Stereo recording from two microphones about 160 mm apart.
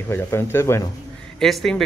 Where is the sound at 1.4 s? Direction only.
Centre (ahead or behind).